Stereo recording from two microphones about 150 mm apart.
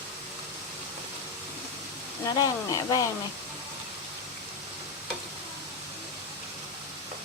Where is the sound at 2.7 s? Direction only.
25° left (ahead or behind).